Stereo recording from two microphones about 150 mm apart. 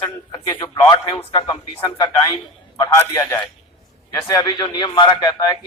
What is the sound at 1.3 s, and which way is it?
Speech, 25° left (ahead or behind).